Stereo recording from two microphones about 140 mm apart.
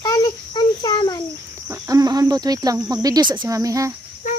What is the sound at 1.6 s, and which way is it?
Speech, 20° right (ahead or behind).